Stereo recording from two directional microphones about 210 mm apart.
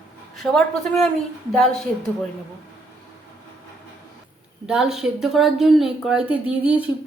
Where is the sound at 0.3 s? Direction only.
Centre (ahead or behind).